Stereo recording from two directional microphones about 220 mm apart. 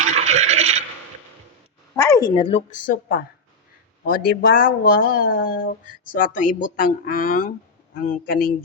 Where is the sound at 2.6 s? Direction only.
35° left (ahead or behind).